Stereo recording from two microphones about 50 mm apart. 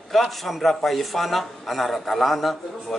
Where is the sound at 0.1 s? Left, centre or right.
Centre.